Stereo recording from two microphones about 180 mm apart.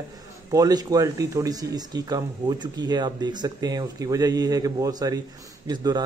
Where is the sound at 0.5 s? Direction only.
20° right (ahead or behind).